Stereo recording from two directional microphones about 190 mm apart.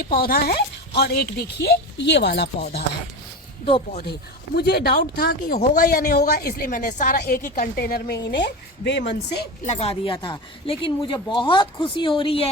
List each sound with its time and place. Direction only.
0.0 s speech: 50° left (ahead or behind)
4.5 s speech: 55° left (ahead or behind)
9.6 s speech: 30° left (ahead or behind)